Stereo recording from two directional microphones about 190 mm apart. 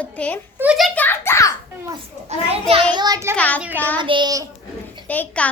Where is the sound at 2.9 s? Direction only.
20° right (ahead or behind).